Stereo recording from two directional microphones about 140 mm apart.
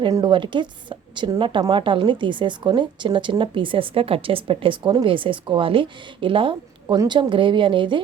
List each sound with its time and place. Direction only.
0.1 s a woman's voice: 30° right (ahead or behind)
6.8 s a woman's voice: 25° right (ahead or behind)